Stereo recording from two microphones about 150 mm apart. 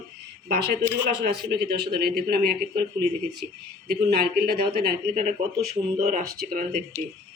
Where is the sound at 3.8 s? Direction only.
85° right.